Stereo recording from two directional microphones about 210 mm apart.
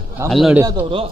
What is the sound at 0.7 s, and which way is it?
Speech, 25° right (ahead or behind).